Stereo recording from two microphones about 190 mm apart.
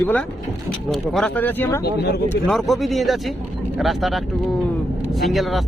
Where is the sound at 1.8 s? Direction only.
60° left (ahead or behind).